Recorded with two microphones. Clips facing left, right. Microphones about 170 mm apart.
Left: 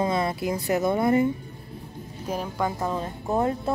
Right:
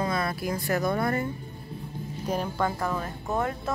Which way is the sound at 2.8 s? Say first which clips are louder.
Left 2 dB; 25° left (ahead or behind).